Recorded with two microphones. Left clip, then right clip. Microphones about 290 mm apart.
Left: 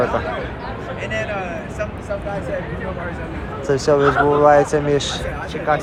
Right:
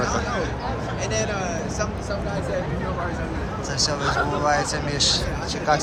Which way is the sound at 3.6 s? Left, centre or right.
Centre.